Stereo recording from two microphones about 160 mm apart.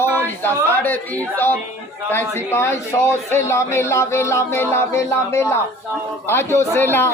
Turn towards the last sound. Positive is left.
turn(degrees=15)  # may be behind; listen again after turning